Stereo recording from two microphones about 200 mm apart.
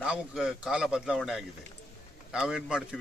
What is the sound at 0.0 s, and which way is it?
Speech, 5° right (ahead or behind).